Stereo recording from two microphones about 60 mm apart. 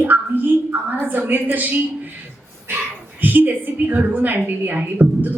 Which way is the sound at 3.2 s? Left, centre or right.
Right.